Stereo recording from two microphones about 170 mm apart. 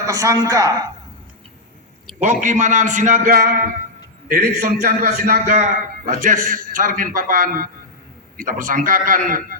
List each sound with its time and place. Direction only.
0.0 s a woman's voice: 20° right (ahead or behind)
2.2 s a man's voice: 45° right (ahead or behind)